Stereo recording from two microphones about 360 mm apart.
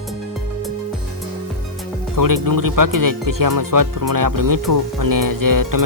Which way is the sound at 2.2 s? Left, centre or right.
Right.